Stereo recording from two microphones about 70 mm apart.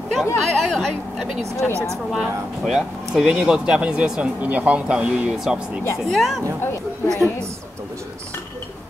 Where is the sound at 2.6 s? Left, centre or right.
Centre.